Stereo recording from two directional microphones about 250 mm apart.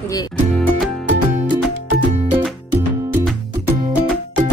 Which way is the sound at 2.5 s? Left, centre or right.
Centre.